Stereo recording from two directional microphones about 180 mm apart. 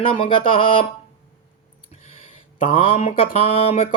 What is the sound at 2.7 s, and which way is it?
Speech, 30° left (ahead or behind).